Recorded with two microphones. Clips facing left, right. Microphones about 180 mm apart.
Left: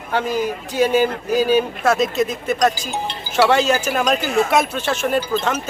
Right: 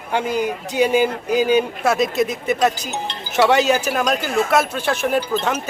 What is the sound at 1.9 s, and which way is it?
Speech, 65° right (ahead or behind).